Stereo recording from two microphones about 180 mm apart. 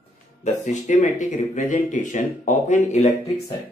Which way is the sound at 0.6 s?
45° left (ahead or behind).